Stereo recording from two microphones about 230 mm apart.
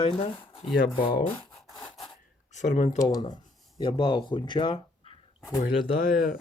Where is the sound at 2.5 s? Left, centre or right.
Left.